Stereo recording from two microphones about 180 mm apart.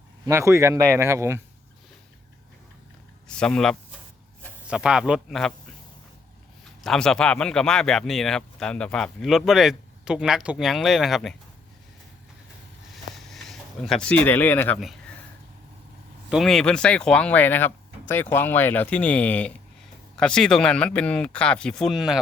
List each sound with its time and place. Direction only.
0.3 s speech: 15° right (ahead or behind)
3.2 s speech: 5° left (ahead or behind)
6.8 s speech: 5° left (ahead or behind)
12.9 s a sound: centre (ahead or behind)
16.3 s speech: centre (ahead or behind)